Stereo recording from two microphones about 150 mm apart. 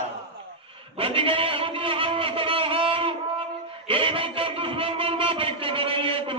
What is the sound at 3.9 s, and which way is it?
A man's voice, 35° right (ahead or behind).